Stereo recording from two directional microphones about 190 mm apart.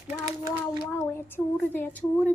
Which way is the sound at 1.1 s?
10° left (ahead or behind).